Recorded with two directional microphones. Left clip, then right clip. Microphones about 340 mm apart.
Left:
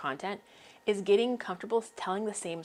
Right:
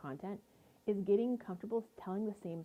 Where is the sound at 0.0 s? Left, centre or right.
Centre.